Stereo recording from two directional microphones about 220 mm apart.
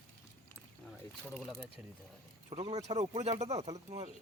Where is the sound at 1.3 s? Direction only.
Centre (ahead or behind).